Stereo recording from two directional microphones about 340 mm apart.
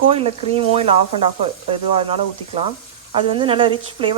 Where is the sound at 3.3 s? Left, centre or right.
Centre.